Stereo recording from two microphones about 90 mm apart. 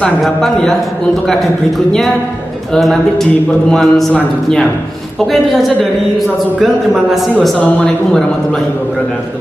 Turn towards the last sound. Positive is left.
turn(degrees=15)  # may be behind; listen again after turning